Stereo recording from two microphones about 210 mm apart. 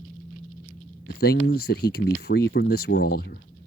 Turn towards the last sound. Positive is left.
turn(degrees=45)  # may be behind; listen again after turning